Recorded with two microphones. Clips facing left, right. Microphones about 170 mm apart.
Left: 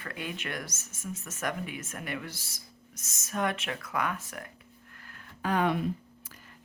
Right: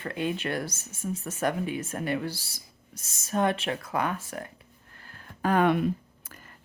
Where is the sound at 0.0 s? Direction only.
30° right (ahead or behind).